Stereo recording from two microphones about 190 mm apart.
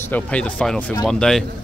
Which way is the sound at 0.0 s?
10° left (ahead or behind).